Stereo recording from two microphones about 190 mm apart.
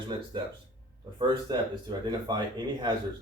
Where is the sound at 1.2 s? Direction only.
25° right (ahead or behind).